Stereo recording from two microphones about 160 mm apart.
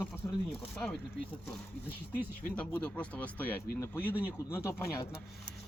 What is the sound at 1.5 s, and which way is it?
Speech, 10° left (ahead or behind).